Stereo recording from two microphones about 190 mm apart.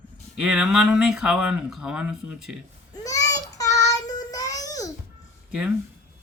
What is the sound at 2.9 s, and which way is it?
Babbling, 20° left (ahead or behind).